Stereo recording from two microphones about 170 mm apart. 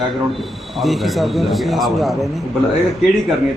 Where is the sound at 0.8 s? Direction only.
Centre (ahead or behind).